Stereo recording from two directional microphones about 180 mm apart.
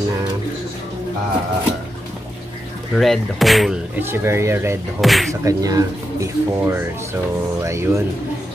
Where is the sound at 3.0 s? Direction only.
Centre (ahead or behind).